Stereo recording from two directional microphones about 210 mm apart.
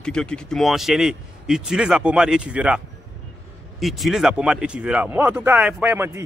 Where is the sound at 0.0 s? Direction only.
5° left (ahead or behind).